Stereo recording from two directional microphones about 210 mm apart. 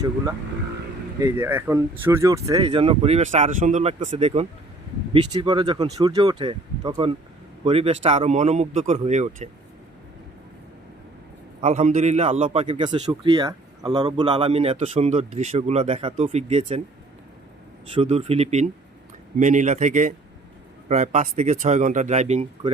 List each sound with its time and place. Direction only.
1.2 s a man's voice: 10° right (ahead or behind); by 9.5 s 35° right (ahead or behind)
11.6 s a man's voice: 30° right (ahead or behind)
17.9 s a man's voice: 25° right (ahead or behind)